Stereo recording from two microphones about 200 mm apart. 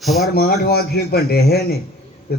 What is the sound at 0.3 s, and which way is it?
A man's voice, 50° left (ahead or behind).